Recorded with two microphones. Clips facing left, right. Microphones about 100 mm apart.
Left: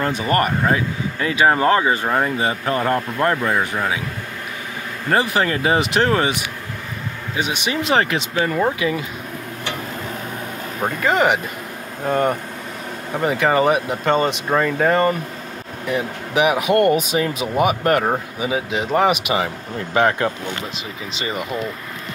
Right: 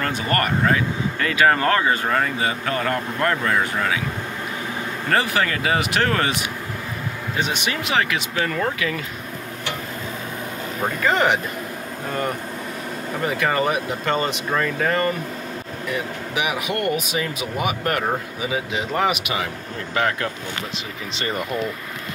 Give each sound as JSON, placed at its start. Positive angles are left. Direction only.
{"t": 0.3, "sound": "speech", "side_deg": 20}
{"t": 5.1, "sound": "speech", "side_deg": 25}
{"t": 7.3, "sound": "speech", "side_deg": 15}
{"t": 7.8, "sound": "speech", "side_deg": 35}
{"t": 8.4, "sound": "speech", "side_deg": 20}
{"t": 10.8, "sound": "speech", "side_deg": 10}
{"t": 12.1, "sound": "speech", "side_deg": 25}
{"t": 16.3, "sound": "speech", "side_deg": 30}
{"t": 21.2, "sound": "speech", "side_deg": 5}